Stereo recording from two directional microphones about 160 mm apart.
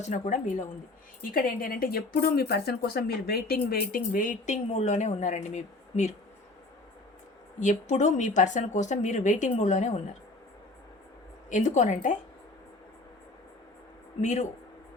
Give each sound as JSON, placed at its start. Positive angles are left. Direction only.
{"t": 0.0, "sound": "speech", "side_deg": 50}
{"t": 1.3, "sound": "speech", "side_deg": 60}
{"t": 7.6, "sound": "speech", "side_deg": 50}
{"t": 11.4, "sound": "speech", "side_deg": 50}
{"t": 14.2, "sound": "speech", "side_deg": 45}